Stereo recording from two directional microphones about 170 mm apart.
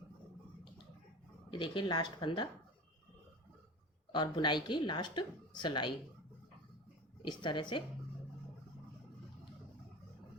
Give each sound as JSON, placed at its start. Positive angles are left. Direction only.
{"t": 1.5, "sound": "a woman's voice", "side_deg": 30}
{"t": 4.1, "sound": "a woman's voice", "side_deg": 25}
{"t": 7.2, "sound": "a woman's voice", "side_deg": 25}